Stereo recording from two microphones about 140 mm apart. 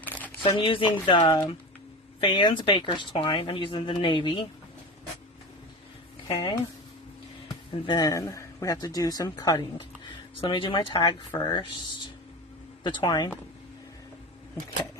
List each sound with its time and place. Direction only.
0.0 s a sound: 10° left (ahead or behind)
0.6 s speech: 40° left (ahead or behind)
6.2 s speech: 40° left (ahead or behind)
7.9 s speech: 25° left (ahead or behind)